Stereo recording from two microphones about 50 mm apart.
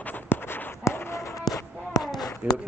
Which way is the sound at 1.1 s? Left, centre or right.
Left.